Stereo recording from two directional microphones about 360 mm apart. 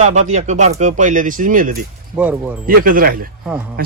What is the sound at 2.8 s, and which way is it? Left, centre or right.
Speech, right.